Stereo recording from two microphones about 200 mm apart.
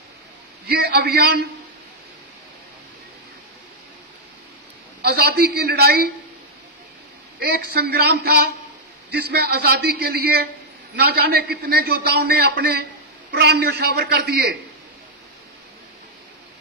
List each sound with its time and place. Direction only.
0.7 s a man's voice: 55° right (ahead or behind)
5.0 s a man's voice: 50° right (ahead or behind)
7.3 s a man's voice: 50° right (ahead or behind)